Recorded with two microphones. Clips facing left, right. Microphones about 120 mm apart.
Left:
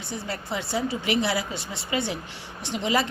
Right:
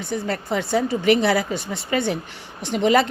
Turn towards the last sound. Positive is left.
turn(degrees=-55)  # may be behind; listen again after turning